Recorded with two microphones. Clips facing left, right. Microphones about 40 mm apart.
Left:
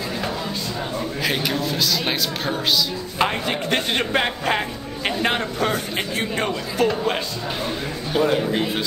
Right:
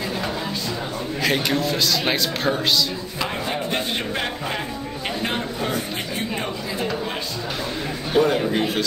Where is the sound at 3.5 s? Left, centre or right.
Left.